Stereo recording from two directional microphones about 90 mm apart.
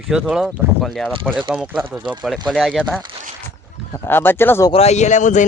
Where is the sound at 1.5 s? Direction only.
10° right (ahead or behind).